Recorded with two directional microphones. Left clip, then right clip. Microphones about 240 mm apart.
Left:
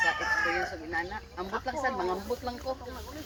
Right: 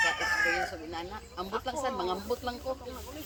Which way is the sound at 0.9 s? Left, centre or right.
Centre.